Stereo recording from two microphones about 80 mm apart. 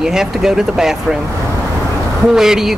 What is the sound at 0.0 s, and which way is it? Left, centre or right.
Speech, centre.